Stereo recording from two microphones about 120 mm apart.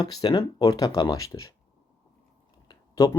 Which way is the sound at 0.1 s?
35° left (ahead or behind).